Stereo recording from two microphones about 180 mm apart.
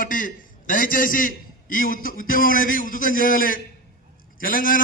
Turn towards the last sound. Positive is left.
turn(degrees=50)  # may be behind; listen again after turning